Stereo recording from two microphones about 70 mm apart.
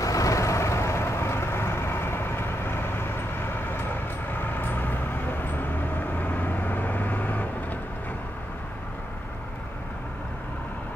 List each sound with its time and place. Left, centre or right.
0.0 s vehicle: left
4.3 s vehicle: left